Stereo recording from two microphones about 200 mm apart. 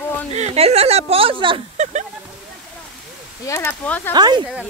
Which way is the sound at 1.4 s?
30° right (ahead or behind).